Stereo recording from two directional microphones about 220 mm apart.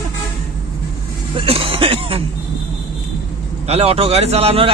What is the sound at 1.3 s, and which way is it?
Throat clearing, 25° right (ahead or behind).